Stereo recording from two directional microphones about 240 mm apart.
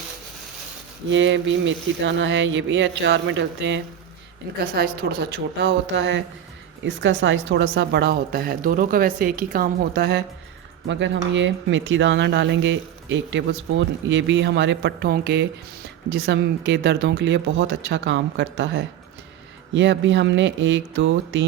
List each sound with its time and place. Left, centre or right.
1.1 s speech: right
4.6 s a woman's voice: right